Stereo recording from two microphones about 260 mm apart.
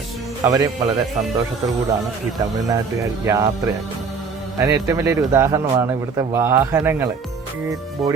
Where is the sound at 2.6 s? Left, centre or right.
Centre.